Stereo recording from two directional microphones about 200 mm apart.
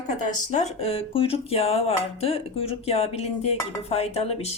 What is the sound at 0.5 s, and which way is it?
Speech, 30° left (ahead or behind).